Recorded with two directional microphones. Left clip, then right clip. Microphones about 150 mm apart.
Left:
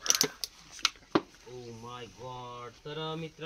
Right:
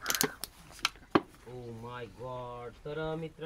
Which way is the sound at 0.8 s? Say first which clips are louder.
Even; 35° right (ahead or behind).